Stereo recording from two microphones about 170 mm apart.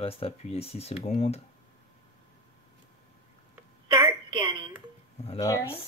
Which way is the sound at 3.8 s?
30° right (ahead or behind).